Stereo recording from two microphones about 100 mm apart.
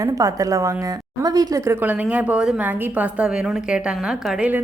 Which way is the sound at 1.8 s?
15° right (ahead or behind).